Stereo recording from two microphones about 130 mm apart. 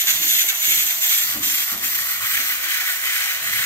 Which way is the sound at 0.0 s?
20° left (ahead or behind).